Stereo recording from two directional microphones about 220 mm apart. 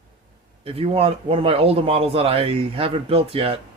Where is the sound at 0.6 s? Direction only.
25° right (ahead or behind).